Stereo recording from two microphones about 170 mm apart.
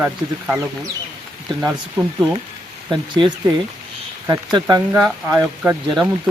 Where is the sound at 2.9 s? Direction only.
30° right (ahead or behind).